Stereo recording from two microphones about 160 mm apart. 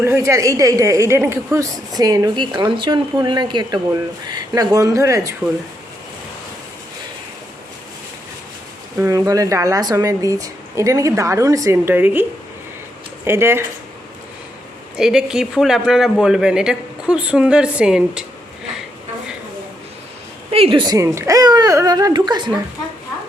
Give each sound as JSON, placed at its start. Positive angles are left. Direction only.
{"t": 0.0, "sound": "speech", "side_deg": -15}
{"t": 9.0, "sound": "speech", "side_deg": -20}
{"t": 13.2, "sound": "speech", "side_deg": -15}
{"t": 14.9, "sound": "speech", "side_deg": -5}
{"t": 20.5, "sound": "speech", "side_deg": -35}